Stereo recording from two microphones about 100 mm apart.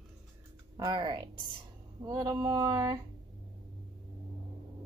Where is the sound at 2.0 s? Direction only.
45° right (ahead or behind).